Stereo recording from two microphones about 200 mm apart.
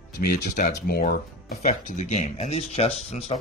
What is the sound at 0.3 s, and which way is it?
Speech, 50° left (ahead or behind).